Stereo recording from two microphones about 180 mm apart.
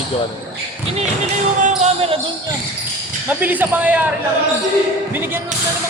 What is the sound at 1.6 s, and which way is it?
Basketball bounce, 35° right (ahead or behind).